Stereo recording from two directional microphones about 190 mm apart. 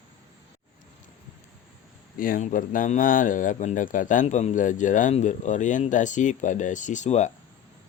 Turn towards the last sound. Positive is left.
turn(degrees=35)  # may be behind; listen again after turning